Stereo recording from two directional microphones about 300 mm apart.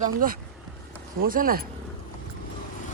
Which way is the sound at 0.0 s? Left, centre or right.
Right.